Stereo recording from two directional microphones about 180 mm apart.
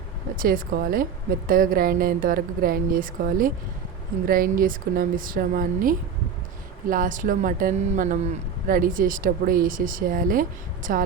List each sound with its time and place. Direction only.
0.3 s speech: 55° right (ahead or behind)